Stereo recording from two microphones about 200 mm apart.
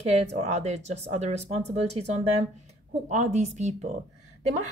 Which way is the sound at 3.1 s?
35° right (ahead or behind).